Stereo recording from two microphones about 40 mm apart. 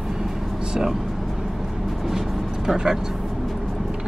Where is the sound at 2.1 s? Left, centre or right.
Centre.